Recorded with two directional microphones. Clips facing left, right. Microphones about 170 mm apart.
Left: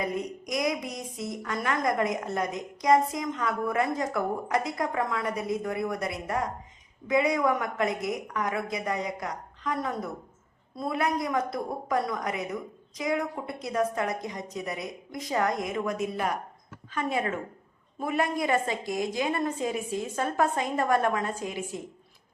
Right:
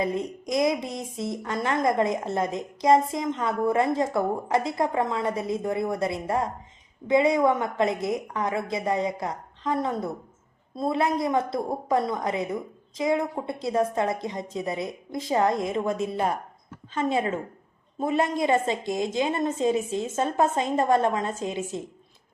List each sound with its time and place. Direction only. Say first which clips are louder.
0.0 s a woman's voice: right 4 dB; 25° right (ahead or behind)